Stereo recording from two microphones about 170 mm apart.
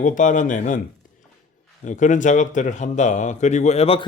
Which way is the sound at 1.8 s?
45° left (ahead or behind).